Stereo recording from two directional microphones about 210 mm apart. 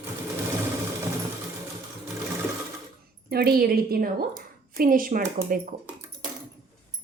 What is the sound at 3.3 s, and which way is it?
A woman's voice, 45° right (ahead or behind).